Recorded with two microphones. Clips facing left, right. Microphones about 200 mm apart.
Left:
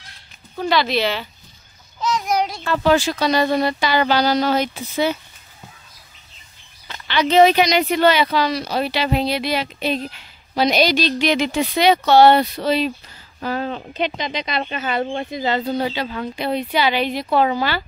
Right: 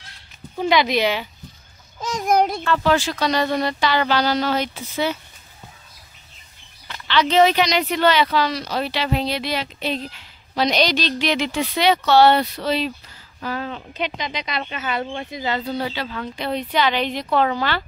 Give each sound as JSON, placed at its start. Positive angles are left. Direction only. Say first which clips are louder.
{"t": 0.6, "sound": "speech", "louder": "right 1 dB", "side_deg": -15}
{"t": 2.0, "sound": "child singing", "louder": "right 2 dB", "side_deg": -50}
{"t": 2.6, "sound": "speech", "louder": "left 2 dB", "side_deg": 15}
{"t": 7.1, "sound": "speech", "louder": "left 2 dB", "side_deg": 15}
{"t": 13.4, "sound": "speech", "louder": "left 4 dB", "side_deg": 35}
{"t": 15.8, "sound": "speech", "louder": "left 3 dB", "side_deg": 20}